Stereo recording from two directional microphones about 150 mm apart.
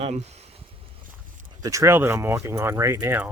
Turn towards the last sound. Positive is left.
turn(degrees=-15)  # may be behind; listen again after turning